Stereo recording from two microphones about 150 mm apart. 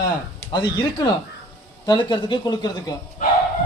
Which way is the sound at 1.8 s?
30° left (ahead or behind).